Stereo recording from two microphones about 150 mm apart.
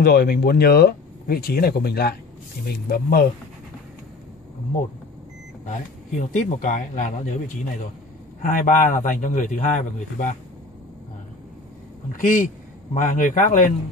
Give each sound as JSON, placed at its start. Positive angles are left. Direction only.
{"t": 0.0, "sound": "speech", "side_deg": 90}
{"t": 5.7, "sound": "a man's voice", "side_deg": 60}
{"t": 8.4, "sound": "a man's voice", "side_deg": 60}
{"t": 12.2, "sound": "a man's voice", "side_deg": 65}